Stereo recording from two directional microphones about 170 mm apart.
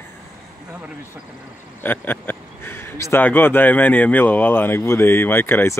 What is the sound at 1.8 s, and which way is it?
Speech, 10° left (ahead or behind).